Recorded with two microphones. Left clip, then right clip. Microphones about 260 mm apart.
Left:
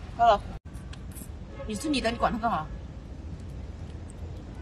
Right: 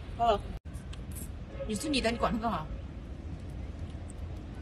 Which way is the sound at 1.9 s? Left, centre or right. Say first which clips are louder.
Left 3 dB; centre.